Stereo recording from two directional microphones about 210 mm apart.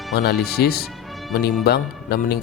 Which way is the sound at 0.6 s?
45° left (ahead or behind).